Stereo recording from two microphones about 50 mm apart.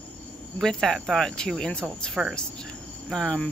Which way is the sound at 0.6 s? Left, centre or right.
Centre.